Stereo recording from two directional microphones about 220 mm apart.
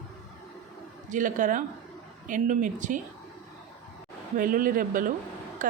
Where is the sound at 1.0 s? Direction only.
35° right (ahead or behind).